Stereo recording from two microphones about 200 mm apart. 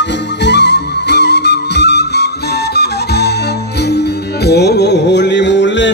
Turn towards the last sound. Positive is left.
turn(degrees=65)  # may be behind; listen again after turning